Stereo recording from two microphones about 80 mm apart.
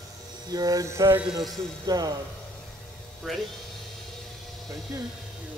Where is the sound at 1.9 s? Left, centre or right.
Right.